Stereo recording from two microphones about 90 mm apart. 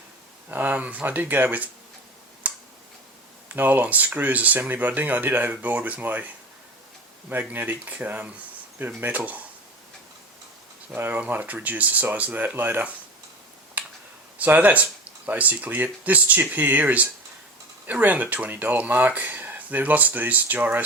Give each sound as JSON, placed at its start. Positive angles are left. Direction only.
{"t": 0.4, "sound": "speech", "side_deg": -20}
{"t": 2.4, "sound": "finger snapping", "side_deg": -15}
{"t": 3.5, "sound": "speech", "side_deg": -20}
{"t": 7.3, "sound": "speech", "side_deg": -20}
{"t": 10.9, "sound": "speech", "side_deg": -20}
{"t": 13.8, "sound": "a sound", "side_deg": -15}
{"t": 14.3, "sound": "speech", "side_deg": -20}